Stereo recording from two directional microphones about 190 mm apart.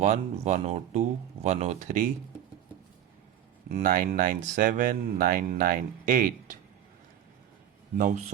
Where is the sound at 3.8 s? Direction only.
50° right (ahead or behind).